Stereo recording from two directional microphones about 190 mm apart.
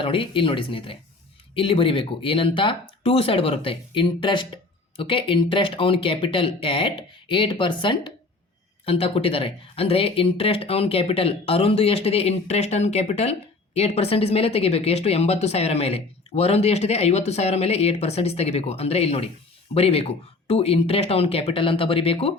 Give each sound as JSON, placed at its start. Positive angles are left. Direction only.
{"t": 0.0, "sound": "speech", "side_deg": 30}